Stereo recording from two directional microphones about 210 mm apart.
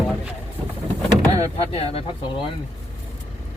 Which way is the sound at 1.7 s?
30° left (ahead or behind).